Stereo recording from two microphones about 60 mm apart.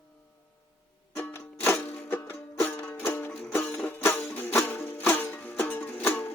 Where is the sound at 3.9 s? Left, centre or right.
Left.